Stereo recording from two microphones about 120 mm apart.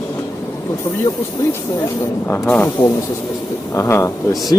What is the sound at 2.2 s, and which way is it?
Speech, 15° left (ahead or behind).